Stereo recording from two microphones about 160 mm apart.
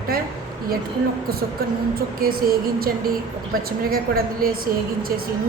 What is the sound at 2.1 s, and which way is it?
A woman's voice, 65° right (ahead or behind).